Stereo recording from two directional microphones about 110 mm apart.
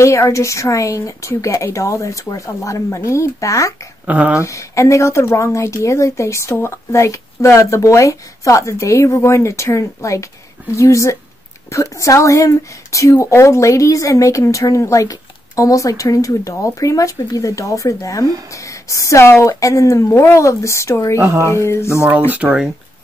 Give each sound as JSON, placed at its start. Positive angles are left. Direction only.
{"t": 0.0, "sound": "speech", "side_deg": 25}
{"t": 4.0, "sound": "speech", "side_deg": -15}
{"t": 4.4, "sound": "speech", "side_deg": 30}
{"t": 21.2, "sound": "a woman's voice", "side_deg": -30}
{"t": 21.5, "sound": "speech", "side_deg": 25}
{"t": 22.3, "sound": "speech", "side_deg": -10}